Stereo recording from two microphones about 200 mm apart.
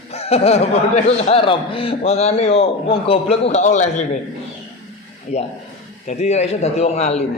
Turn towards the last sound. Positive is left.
turn(degrees=35)  # may be behind; listen again after turning